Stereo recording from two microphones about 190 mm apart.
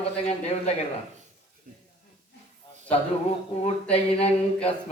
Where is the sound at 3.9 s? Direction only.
30° left (ahead or behind).